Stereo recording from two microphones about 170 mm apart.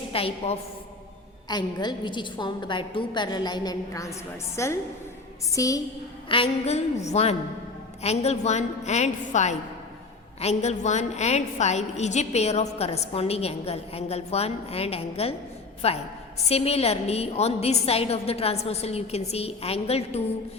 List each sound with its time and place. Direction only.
0.1 s a woman's voice: 35° left (ahead or behind)
6.2 s a woman's voice: 30° left (ahead or behind)